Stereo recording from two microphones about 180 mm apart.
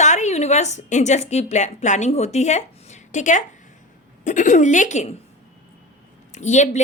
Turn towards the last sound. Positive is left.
turn(degrees=40)  # may be behind; listen again after turning